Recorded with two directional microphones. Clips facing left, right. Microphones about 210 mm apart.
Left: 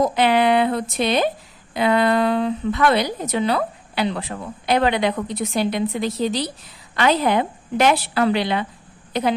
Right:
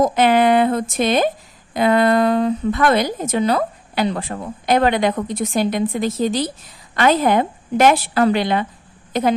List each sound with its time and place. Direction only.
0.0 s a woman's voice: 45° right (ahead or behind)